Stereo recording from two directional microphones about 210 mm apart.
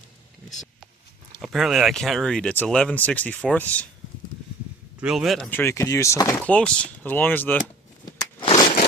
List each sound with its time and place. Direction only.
1.4 s speech: centre (ahead or behind)
4.9 s speech: centre (ahead or behind)
8.4 s a sound: 25° left (ahead or behind)